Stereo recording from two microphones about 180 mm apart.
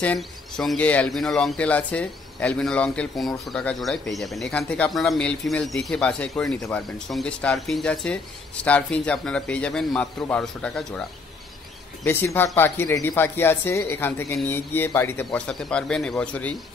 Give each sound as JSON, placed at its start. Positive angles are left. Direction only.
{"t": 0.0, "sound": "speech", "side_deg": 5}
{"t": 12.0, "sound": "speech", "side_deg": 10}